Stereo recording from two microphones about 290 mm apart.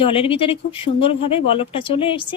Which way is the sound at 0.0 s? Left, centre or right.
Centre.